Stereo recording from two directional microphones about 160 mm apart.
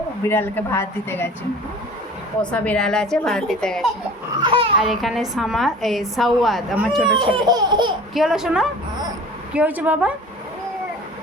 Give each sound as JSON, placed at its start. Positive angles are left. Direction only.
{"t": 0.3, "sound": "speech", "side_deg": 15}
{"t": 2.4, "sound": "a woman's voice", "side_deg": 5}
{"t": 7.2, "sound": "laughter", "side_deg": -30}
{"t": 8.1, "sound": "a woman's voice", "side_deg": 0}